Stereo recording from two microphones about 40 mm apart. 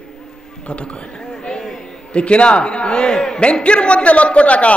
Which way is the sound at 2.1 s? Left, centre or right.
Left.